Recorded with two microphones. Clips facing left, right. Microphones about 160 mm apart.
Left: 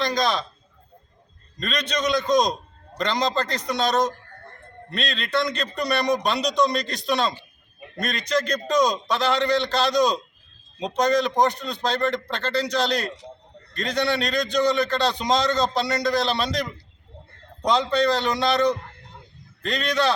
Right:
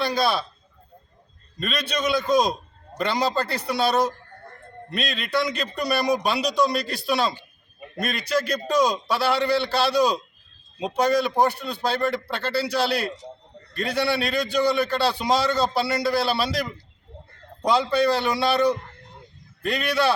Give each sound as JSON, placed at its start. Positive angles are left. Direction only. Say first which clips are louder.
{"t": 0.0, "sound": "a man's voice", "louder": "even", "side_deg": -10}
{"t": 1.5, "sound": "a man's voice", "louder": "even", "side_deg": -10}